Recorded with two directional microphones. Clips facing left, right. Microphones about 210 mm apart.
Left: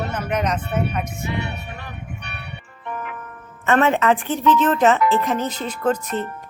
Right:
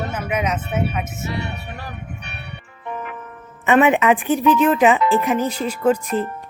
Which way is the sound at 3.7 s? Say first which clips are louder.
Right 2 dB; 15° right (ahead or behind).